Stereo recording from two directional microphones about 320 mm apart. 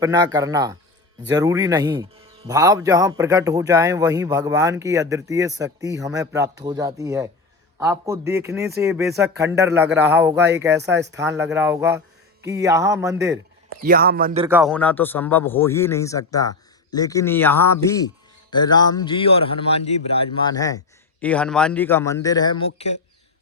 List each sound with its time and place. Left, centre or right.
0.0 s speech: centre
13.8 s a man's voice: right
14.4 s a man's voice: centre